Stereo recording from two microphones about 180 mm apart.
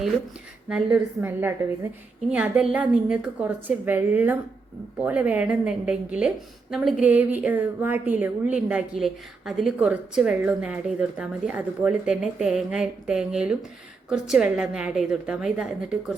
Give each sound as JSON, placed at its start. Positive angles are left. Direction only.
{"t": 0.7, "sound": "a woman's voice", "side_deg": -10}